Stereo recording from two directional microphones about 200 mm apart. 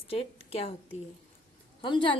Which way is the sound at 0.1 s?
30° left (ahead or behind).